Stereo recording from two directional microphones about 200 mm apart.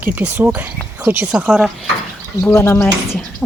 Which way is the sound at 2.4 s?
10° left (ahead or behind).